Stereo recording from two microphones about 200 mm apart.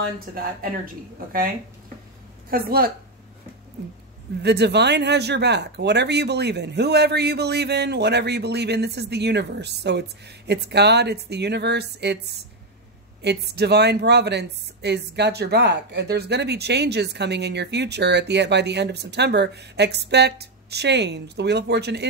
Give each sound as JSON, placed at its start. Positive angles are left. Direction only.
{"t": 0.3, "sound": "speech", "side_deg": -45}
{"t": 2.5, "sound": "speech", "side_deg": -50}
{"t": 4.4, "sound": "speech", "side_deg": -55}
{"t": 13.2, "sound": "speech", "side_deg": -55}